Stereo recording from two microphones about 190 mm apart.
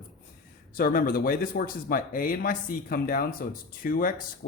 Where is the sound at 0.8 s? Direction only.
50° left (ahead or behind).